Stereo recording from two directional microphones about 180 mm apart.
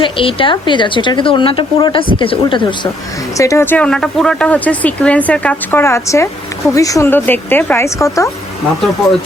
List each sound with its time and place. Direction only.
0.0 s a woman's voice: 30° left (ahead or behind)